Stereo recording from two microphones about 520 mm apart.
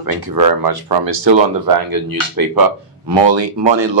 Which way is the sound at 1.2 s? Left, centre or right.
Right.